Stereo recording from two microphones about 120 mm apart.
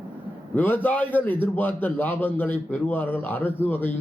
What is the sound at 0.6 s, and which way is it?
A man's voice, 15° left (ahead or behind).